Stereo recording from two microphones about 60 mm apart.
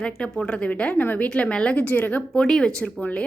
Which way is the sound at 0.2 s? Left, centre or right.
Centre.